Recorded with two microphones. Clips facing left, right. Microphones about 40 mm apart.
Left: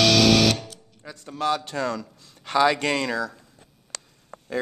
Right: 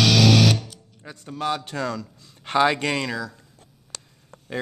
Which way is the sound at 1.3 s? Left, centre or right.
Centre.